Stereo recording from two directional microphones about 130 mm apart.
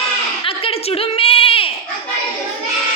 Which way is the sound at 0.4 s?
45° left (ahead or behind).